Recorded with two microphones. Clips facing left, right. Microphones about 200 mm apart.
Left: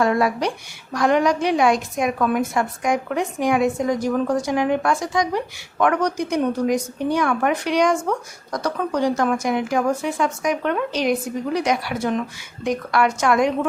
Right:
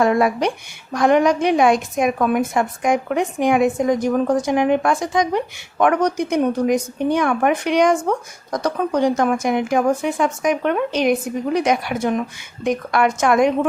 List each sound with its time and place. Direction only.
0.0 s speech: 20° right (ahead or behind)